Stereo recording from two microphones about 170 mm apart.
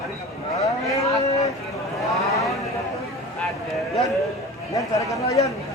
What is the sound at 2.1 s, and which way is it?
Speech, 20° left (ahead or behind).